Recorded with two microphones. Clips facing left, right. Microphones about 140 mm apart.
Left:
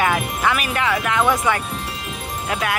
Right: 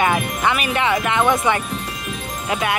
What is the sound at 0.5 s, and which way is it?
Speech, centre (ahead or behind).